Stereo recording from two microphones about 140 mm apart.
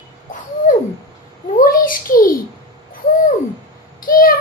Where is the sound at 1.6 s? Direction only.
85° left.